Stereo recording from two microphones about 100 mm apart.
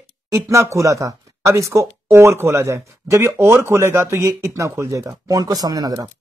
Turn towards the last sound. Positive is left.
turn(degrees=-40)  # may be behind; listen again after turning